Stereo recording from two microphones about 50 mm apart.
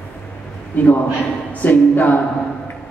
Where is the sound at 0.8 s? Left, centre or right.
Left.